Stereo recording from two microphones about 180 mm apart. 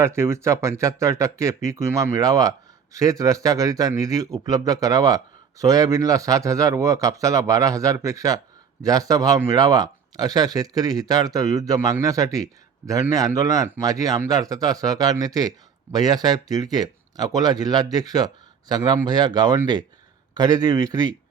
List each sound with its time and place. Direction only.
0.0 s speech: 15° right (ahead or behind)